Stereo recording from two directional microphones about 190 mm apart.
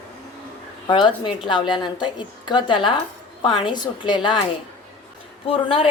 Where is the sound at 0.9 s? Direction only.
25° left (ahead or behind).